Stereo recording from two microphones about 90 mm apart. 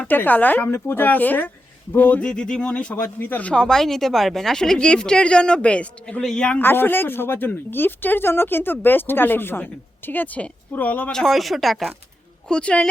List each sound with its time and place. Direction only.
0.1 s a woman's voice: 20° left (ahead or behind)
6.6 s a woman's voice: 25° left (ahead or behind)
11.1 s speech: 5° left (ahead or behind)
12.5 s speech: 10° left (ahead or behind)